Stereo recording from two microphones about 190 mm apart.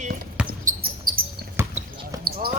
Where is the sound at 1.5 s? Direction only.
15° right (ahead or behind).